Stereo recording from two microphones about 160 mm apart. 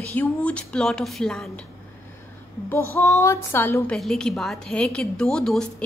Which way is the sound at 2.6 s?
15° left (ahead or behind).